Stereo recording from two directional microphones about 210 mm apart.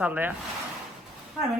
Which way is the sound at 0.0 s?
5° right (ahead or behind).